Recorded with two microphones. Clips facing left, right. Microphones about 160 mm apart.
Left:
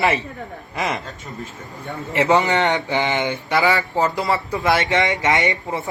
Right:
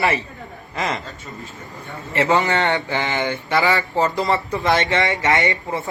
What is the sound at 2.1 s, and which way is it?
Speech, 20° left (ahead or behind).